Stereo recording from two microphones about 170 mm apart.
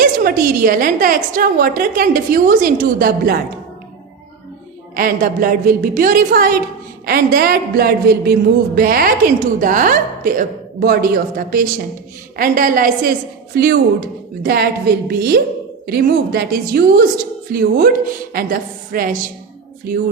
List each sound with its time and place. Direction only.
0.0 s a woman's voice: 60° right (ahead or behind)
4.9 s a woman's voice: 55° right (ahead or behind)